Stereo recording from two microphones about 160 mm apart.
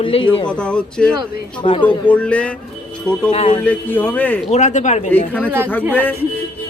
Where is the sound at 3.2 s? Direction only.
35° left (ahead or behind).